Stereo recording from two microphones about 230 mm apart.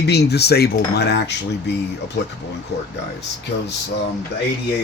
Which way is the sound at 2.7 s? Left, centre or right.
Left.